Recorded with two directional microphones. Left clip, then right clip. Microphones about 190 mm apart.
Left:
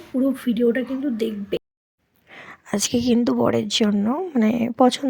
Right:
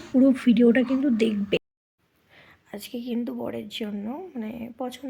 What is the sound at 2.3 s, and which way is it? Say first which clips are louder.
A woman's voice: left 14 dB; 45° left (ahead or behind).